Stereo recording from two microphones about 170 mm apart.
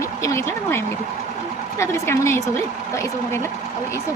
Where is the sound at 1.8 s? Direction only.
15° left (ahead or behind).